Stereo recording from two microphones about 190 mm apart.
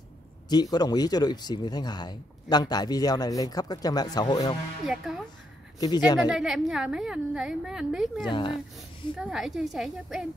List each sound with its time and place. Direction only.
0.5 s speech: 20° left (ahead or behind)
4.8 s a woman's voice: centre (ahead or behind)
5.8 s speech: 20° left (ahead or behind)
6.3 s a woman's voice: centre (ahead or behind)
8.3 s speech: 25° left (ahead or behind)
9.2 s a woman's voice: centre (ahead or behind)